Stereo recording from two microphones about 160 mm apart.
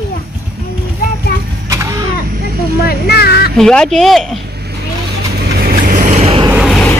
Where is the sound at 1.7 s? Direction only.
20° right (ahead or behind).